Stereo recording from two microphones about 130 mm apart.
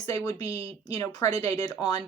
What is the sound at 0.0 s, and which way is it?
Speech, 25° left (ahead or behind).